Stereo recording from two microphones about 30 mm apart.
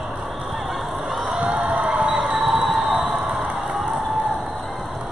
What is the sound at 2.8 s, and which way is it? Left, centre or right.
Music, centre.